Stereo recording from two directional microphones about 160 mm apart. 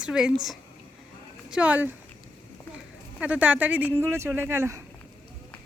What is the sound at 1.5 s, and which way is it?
Speech, 10° right (ahead or behind).